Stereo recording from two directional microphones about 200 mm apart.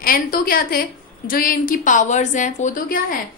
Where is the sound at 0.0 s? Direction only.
45° left (ahead or behind).